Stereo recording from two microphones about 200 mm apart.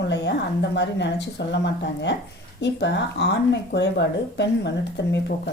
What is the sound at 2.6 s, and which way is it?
Speech, 60° left (ahead or behind).